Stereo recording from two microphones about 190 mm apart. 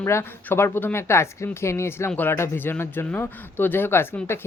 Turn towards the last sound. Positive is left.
turn(degrees=10)  # may be behind; listen again after turning